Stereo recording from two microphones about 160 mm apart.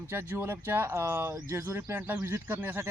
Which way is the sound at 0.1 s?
15° right (ahead or behind).